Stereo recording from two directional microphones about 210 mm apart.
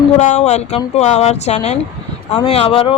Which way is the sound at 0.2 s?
35° left (ahead or behind).